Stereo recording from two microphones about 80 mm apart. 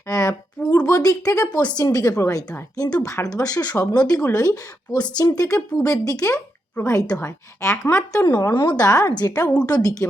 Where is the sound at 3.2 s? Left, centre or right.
Left.